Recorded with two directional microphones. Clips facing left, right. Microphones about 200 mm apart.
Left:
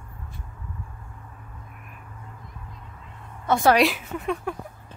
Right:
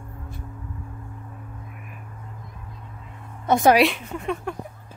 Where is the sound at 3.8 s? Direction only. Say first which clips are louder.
Right 1 dB; centre (ahead or behind).